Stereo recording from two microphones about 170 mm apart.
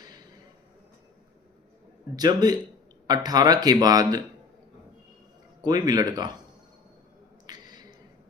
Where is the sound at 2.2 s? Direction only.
25° right (ahead or behind).